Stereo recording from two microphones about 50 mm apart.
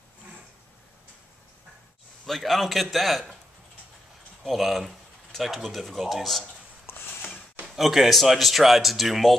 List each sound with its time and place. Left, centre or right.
2.2 s speech: centre
4.4 s speech: centre
6.9 s a sound: left
7.6 s speech: centre